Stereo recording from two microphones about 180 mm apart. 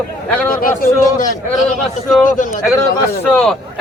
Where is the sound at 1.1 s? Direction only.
45° left (ahead or behind).